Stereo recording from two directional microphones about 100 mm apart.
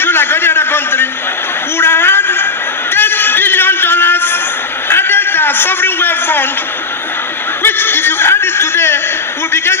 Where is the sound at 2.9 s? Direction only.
20° left (ahead or behind).